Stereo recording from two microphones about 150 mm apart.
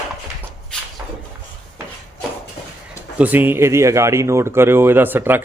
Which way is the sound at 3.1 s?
10° right (ahead or behind).